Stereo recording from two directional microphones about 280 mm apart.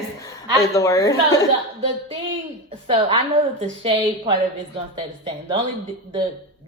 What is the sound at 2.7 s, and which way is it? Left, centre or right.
A woman's voice, centre.